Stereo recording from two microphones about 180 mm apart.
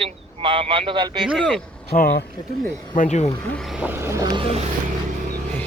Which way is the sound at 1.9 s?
50° left (ahead or behind).